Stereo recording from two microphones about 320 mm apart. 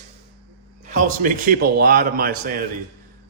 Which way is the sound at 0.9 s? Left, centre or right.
Right.